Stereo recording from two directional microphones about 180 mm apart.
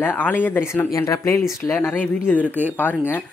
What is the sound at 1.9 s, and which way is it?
Speech, centre (ahead or behind).